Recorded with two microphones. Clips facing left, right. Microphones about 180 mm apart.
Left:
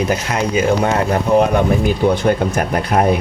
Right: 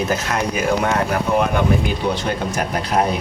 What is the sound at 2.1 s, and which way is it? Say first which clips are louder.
Speech: left 6 dB; 55° left (ahead or behind).